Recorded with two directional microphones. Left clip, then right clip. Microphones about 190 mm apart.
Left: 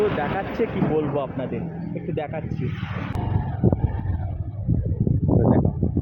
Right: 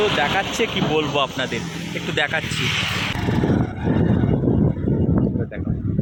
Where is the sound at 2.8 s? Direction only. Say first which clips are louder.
Right 11 dB; 50° right (ahead or behind).